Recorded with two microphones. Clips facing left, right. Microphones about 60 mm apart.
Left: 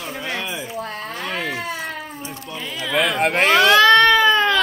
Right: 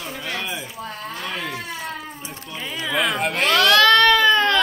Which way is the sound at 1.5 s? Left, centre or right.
Left.